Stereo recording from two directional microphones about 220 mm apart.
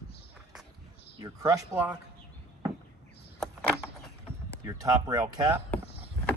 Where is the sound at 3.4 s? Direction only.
Centre (ahead or behind).